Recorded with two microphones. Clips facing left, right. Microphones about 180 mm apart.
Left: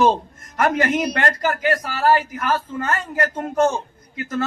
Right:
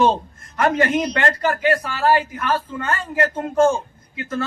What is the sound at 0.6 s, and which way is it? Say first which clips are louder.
A man's voice: right 1 dB; 30° right (ahead or behind).